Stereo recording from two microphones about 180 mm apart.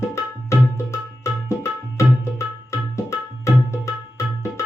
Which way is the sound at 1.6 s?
15° left (ahead or behind).